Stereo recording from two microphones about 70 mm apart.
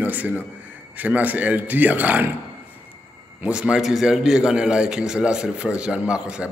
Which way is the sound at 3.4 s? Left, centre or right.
Centre.